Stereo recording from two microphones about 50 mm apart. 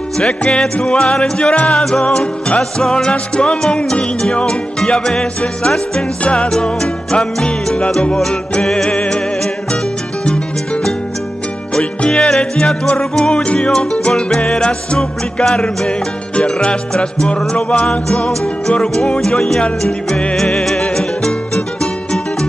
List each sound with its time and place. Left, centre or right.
0.2 s music: centre
8.9 s music: left
10.2 s music: centre